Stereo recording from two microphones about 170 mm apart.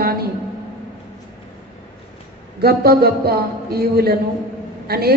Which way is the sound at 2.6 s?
65° right (ahead or behind).